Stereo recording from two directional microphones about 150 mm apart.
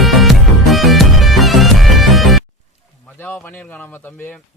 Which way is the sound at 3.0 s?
15° left (ahead or behind).